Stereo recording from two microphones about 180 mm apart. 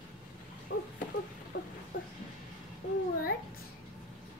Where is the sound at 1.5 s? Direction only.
90° left.